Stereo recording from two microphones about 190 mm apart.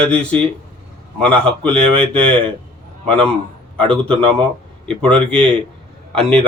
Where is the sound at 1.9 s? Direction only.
30° right (ahead or behind).